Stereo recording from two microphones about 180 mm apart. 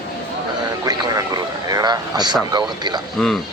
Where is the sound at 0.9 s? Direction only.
20° right (ahead or behind).